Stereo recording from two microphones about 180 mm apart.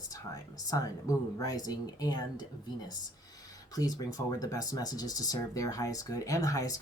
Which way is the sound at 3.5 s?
20° left (ahead or behind).